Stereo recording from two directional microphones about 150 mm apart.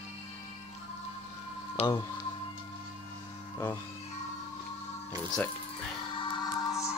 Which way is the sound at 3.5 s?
15° left (ahead or behind).